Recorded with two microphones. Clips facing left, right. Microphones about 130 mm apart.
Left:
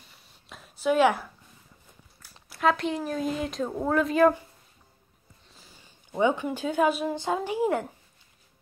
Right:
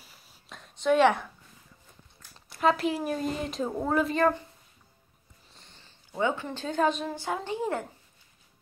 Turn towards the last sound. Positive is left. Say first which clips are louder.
# left 4 dB
turn(degrees=10)  # may be behind; listen again after turning